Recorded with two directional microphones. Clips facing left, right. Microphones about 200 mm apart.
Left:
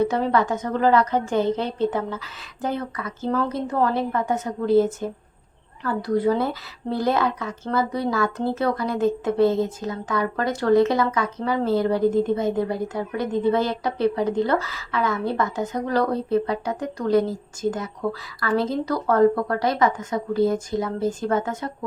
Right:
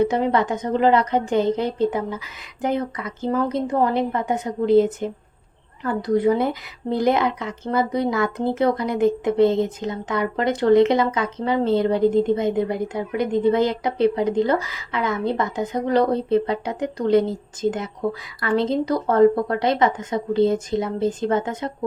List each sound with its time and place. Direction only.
0.0 s a woman's voice: 15° right (ahead or behind)